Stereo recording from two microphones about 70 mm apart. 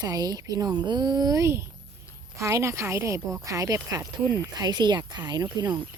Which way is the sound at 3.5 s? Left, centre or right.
Right.